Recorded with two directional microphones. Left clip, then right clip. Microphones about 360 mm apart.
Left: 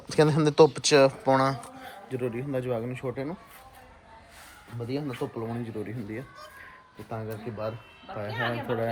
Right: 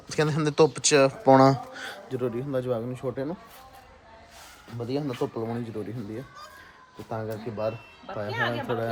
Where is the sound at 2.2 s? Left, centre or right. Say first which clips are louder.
Right 2 dB; centre.